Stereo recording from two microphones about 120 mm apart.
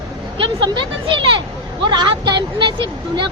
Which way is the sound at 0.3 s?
40° right (ahead or behind).